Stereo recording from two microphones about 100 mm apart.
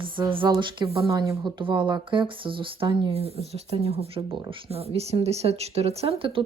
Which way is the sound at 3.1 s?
90° right.